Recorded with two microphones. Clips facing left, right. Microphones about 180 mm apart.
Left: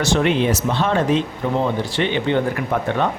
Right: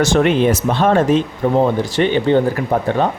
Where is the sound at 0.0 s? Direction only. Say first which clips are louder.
Right 4 dB; 50° right (ahead or behind).